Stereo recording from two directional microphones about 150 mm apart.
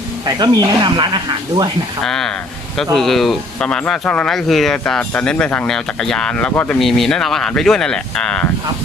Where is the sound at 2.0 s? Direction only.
5° left (ahead or behind).